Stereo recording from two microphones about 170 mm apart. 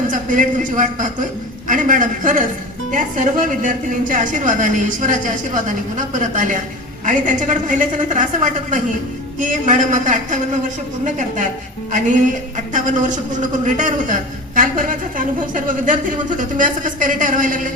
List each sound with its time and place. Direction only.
0.1 s a woman's voice: 50° right (ahead or behind)